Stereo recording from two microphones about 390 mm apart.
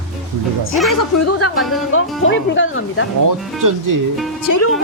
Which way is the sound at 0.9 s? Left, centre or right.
Left.